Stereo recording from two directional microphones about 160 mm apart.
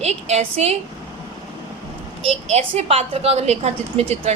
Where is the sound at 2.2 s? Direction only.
40° right (ahead or behind).